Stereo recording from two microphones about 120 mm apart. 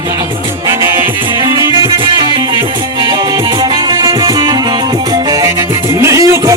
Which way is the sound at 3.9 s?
35° right (ahead or behind).